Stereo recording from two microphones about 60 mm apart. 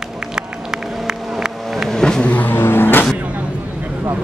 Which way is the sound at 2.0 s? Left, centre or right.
Centre.